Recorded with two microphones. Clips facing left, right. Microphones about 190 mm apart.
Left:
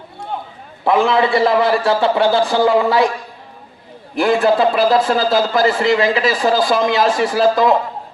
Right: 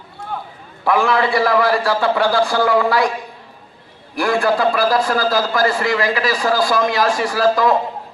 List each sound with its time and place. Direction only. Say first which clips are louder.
0.9 s a man's voice: left 2 dB; 20° left (ahead or behind)
4.1 s a man's voice: left 3 dB; 20° left (ahead or behind)